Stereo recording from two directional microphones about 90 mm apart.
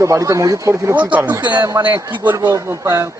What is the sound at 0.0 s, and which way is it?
Speech, 35° right (ahead or behind).